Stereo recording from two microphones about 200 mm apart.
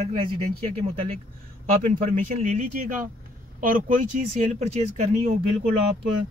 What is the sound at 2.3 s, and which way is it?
Speech, 35° right (ahead or behind).